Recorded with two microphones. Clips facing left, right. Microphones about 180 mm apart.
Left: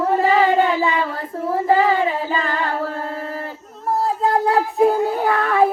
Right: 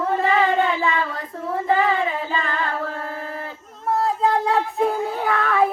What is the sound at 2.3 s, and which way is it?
Singing, 35° left (ahead or behind).